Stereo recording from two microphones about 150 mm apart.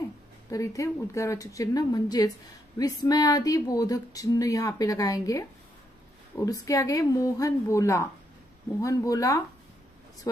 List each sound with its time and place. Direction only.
0.5 s speech: 20° left (ahead or behind)